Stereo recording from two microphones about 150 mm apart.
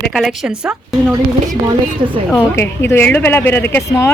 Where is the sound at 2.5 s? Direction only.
15° left (ahead or behind).